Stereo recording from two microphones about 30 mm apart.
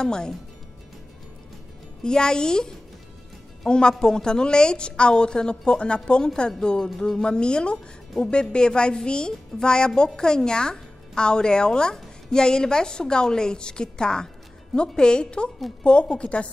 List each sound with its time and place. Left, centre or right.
0.0 s a woman's voice: left
2.0 s a woman's voice: left